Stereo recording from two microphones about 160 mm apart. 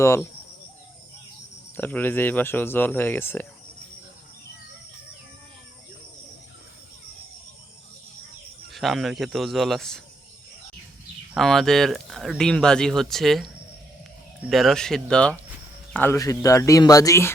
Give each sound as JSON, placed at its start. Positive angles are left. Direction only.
{"t": 0.0, "sound": "speech", "side_deg": 15}
{"t": 1.7, "sound": "speech", "side_deg": 10}
{"t": 8.7, "sound": "speech", "side_deg": 0}
{"t": 11.3, "sound": "speech", "side_deg": 0}